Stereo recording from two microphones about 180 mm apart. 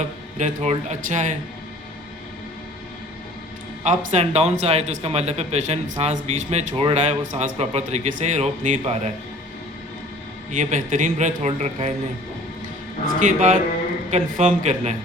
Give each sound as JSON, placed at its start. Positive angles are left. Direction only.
{"t": 0.3, "sound": "speech", "side_deg": -40}
{"t": 3.8, "sound": "speech", "side_deg": -35}
{"t": 10.5, "sound": "speech", "side_deg": -45}
{"t": 13.1, "sound": "speech", "side_deg": -45}